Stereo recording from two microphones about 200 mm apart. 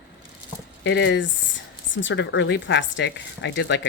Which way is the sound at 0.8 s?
65° left (ahead or behind).